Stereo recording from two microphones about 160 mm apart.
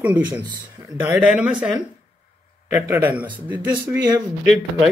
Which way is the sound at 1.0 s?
10° right (ahead or behind).